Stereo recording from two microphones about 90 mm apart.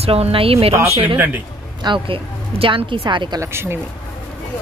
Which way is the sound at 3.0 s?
55° right (ahead or behind).